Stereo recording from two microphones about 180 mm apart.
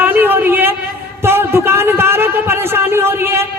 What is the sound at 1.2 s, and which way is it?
A man's voice, 15° right (ahead or behind).